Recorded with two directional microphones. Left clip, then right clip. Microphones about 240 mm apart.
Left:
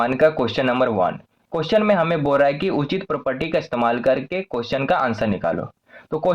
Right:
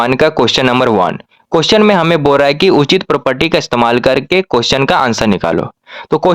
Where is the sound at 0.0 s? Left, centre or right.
Right.